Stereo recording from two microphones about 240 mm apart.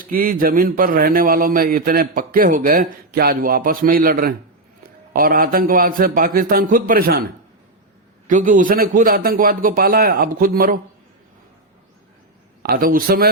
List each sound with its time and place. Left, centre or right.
0.0 s a man's voice: right
8.3 s a man's voice: right
12.6 s a man's voice: right